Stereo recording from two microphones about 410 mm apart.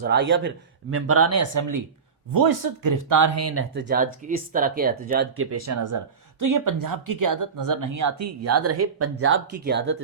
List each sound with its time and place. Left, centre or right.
0.0 s speech: right